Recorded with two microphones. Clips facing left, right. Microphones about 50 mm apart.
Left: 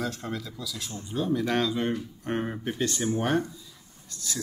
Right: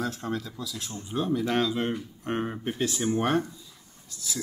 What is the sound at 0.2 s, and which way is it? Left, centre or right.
Speech, right.